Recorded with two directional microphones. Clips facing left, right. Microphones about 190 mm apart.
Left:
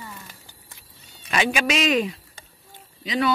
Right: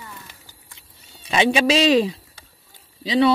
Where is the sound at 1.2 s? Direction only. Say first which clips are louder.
Right 5 dB; 30° right (ahead or behind).